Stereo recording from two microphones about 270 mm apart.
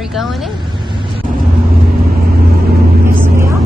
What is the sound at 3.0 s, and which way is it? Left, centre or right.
Vehicle, centre.